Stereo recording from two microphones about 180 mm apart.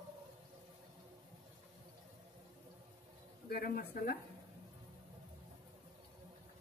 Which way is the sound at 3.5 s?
55° left (ahead or behind).